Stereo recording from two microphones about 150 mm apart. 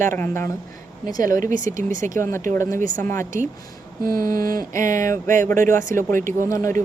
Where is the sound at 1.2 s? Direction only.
65° right (ahead or behind).